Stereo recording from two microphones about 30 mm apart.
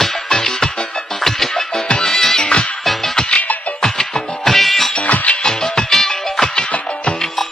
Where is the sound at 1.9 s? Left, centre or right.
Left.